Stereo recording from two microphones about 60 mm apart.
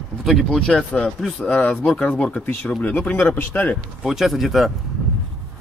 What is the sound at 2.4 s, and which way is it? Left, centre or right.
Speech, left.